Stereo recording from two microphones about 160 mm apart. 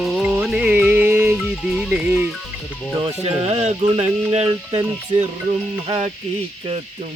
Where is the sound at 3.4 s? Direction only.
40° right (ahead or behind).